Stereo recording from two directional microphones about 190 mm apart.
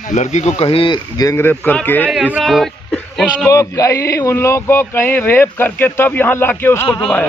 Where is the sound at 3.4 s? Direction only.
15° left (ahead or behind).